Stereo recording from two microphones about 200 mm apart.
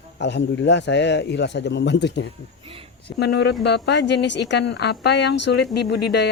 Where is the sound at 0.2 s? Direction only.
60° left (ahead or behind).